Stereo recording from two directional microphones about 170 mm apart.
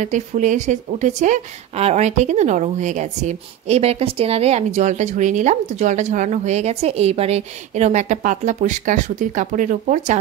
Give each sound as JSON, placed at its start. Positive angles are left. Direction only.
{"t": 0.0, "sound": "speech", "side_deg": -45}